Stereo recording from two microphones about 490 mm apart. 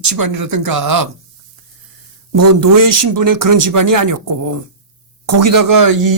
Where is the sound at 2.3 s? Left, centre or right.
Right.